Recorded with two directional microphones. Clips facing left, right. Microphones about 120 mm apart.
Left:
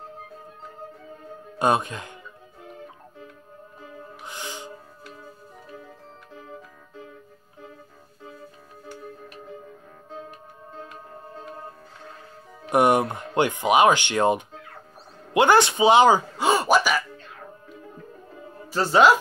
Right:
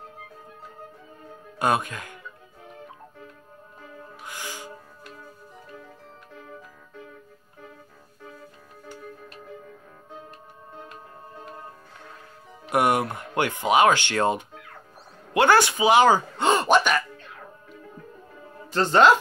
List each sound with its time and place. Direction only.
1.6 s speech: 25° left (ahead or behind)
4.2 s music: 20° left (ahead or behind)
10.8 s music: 5° right (ahead or behind)
12.6 s speech: 25° left (ahead or behind); by 17.0 s 5° left (ahead or behind)
18.7 s speech: 10° left (ahead or behind)